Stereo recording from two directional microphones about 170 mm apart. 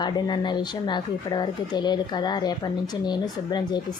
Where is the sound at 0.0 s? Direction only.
25° left (ahead or behind).